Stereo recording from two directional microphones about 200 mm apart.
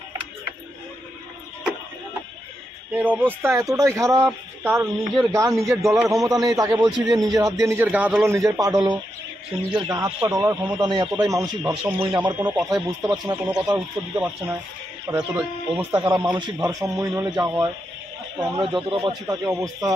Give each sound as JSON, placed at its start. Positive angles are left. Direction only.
{"t": 2.9, "sound": "speech", "side_deg": -10}
{"t": 8.4, "sound": "speech", "side_deg": -15}
{"t": 13.7, "sound": "speech", "side_deg": -10}
{"t": 18.8, "sound": "speech", "side_deg": -25}